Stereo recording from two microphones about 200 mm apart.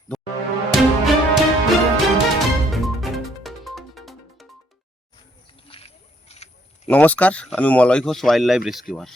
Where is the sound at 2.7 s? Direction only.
Centre (ahead or behind).